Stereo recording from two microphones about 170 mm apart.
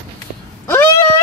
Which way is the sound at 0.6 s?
15° left (ahead or behind).